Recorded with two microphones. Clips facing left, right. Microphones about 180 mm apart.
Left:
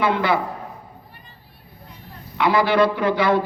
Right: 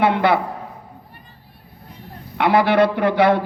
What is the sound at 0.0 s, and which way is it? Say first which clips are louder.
Speech: right 3 dB; 60° right (ahead or behind).